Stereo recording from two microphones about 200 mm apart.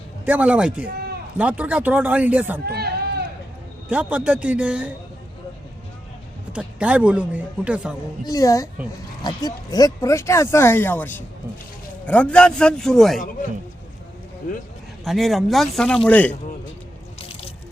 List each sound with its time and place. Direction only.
0.3 s a man's voice: 5° right (ahead or behind)
2.6 s a sound: 50° right (ahead or behind)
3.8 s speech: 5° right (ahead or behind)
6.5 s a man's voice: 5° right (ahead or behind)
8.3 s a man's voice: 15° left (ahead or behind); by 13.2 s centre (ahead or behind)
15.0 s a man's voice: centre (ahead or behind)